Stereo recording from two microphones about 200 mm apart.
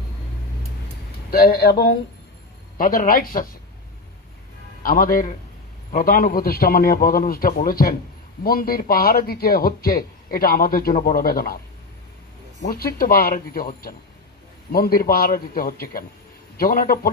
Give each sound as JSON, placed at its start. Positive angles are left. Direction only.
{"t": 1.3, "sound": "speech", "side_deg": 50}
{"t": 4.8, "sound": "speech", "side_deg": 45}
{"t": 12.6, "sound": "speech", "side_deg": 50}